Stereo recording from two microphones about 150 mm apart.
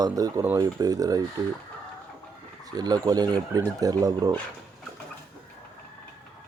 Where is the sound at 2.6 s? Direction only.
25° right (ahead or behind).